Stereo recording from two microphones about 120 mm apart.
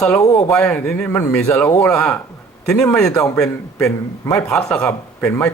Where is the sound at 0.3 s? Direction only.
5° left (ahead or behind).